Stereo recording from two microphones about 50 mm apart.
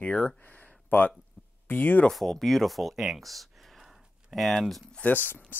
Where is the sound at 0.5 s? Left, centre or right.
Left.